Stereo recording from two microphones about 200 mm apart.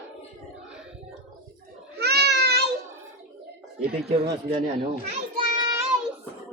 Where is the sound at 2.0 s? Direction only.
55° right (ahead or behind).